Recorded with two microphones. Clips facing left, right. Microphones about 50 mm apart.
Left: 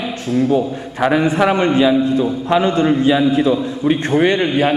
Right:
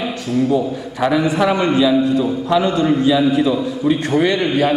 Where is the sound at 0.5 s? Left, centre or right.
Left.